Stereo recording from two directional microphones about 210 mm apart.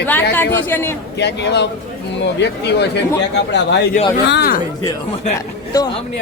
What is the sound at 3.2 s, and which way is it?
Speech, 55° left (ahead or behind).